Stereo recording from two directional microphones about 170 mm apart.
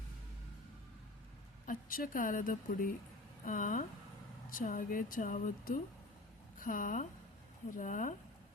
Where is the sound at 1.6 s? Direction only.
55° left (ahead or behind).